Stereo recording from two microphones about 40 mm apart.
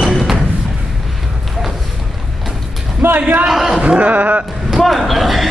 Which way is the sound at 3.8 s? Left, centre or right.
Right.